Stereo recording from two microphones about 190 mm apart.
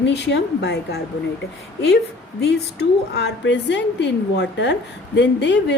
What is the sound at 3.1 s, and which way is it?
A woman's voice, 65° left (ahead or behind).